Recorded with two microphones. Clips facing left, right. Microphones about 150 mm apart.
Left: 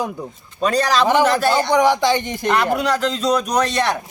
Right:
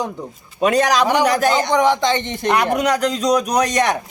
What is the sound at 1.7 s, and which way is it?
Speech, 10° left (ahead or behind).